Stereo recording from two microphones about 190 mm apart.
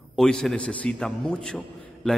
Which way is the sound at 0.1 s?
Centre (ahead or behind).